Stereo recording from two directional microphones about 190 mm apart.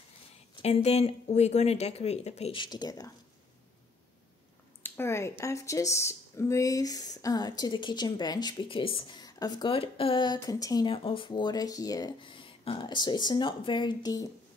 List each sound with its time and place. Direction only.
0.6 s speech: 30° left (ahead or behind)
4.8 s speech: 10° left (ahead or behind)